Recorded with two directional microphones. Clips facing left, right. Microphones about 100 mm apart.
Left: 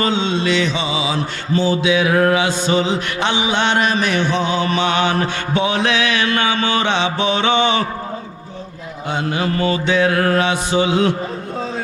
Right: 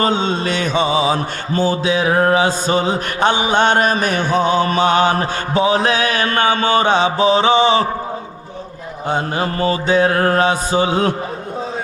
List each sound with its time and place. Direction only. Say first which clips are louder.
0.0 s mantra: right 1 dB; 45° right (ahead or behind)
9.0 s mantra: right 1 dB; 40° right (ahead or behind)